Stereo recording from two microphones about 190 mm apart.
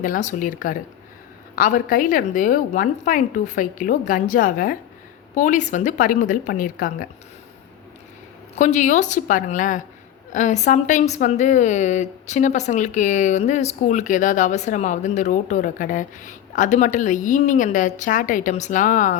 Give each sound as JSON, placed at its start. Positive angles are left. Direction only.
{"t": 0.0, "sound": "a woman's voice", "side_deg": 45}
{"t": 8.5, "sound": "a woman's voice", "side_deg": 40}